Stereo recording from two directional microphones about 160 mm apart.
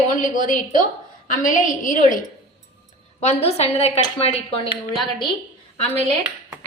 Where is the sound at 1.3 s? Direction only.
55° left (ahead or behind).